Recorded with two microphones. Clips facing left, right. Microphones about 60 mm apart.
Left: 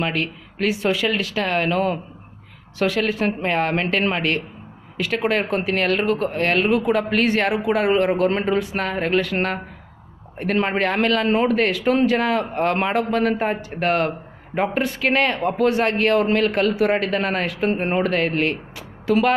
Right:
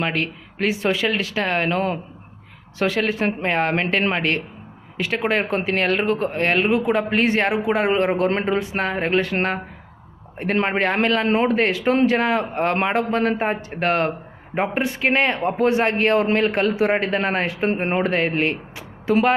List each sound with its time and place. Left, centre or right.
0.0 s a man's voice: right